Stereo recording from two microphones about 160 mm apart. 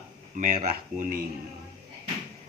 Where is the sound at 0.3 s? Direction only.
55° right (ahead or behind).